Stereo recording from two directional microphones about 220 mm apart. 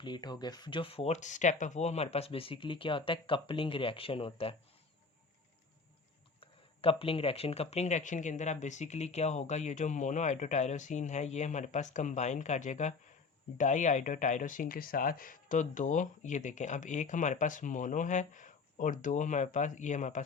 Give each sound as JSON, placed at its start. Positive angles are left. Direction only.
{"t": 0.0, "sound": "speech", "side_deg": 20}
{"t": 6.4, "sound": "speech", "side_deg": 25}